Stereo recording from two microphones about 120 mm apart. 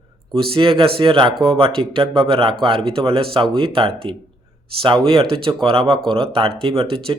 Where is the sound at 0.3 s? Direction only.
50° right (ahead or behind).